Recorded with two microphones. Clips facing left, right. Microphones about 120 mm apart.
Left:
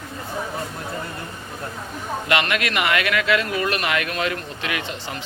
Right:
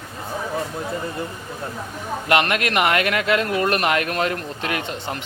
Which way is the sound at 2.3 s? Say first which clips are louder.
Right 3 dB; 45° right (ahead or behind).